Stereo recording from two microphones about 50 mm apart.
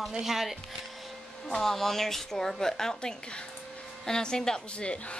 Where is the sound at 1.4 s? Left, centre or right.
Centre.